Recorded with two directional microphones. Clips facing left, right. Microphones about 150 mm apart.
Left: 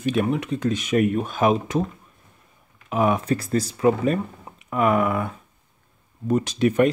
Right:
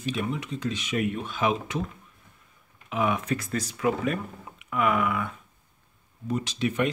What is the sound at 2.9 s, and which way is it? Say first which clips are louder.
Speech: left 5 dB; 40° left (ahead or behind).